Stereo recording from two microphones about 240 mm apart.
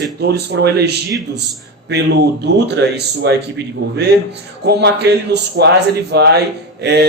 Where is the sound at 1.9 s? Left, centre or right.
Right.